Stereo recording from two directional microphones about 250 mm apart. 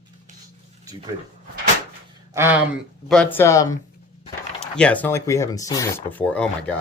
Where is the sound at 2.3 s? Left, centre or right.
Centre.